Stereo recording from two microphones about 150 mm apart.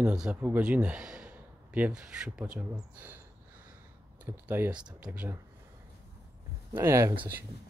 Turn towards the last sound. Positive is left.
turn(degrees=-20)  # may be behind; listen again after turning